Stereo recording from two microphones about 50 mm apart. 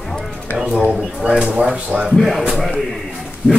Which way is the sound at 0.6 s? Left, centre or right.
Centre.